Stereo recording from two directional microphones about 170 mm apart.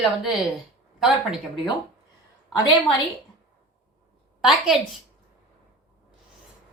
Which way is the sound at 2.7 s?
30° left (ahead or behind).